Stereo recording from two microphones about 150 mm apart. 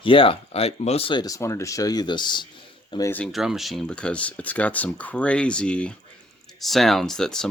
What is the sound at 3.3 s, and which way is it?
Speech, centre (ahead or behind).